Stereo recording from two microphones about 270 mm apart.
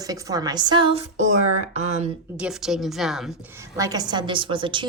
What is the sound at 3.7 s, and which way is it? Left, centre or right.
A woman's voice, centre.